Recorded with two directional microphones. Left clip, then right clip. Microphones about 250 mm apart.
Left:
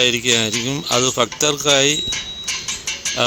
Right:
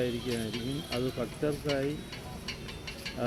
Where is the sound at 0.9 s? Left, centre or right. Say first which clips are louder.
Left 17 dB; left.